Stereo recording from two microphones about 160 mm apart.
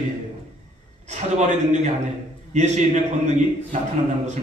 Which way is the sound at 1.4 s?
45° right (ahead or behind).